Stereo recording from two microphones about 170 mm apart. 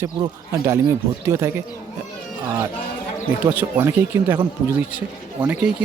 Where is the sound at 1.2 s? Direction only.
15° right (ahead or behind).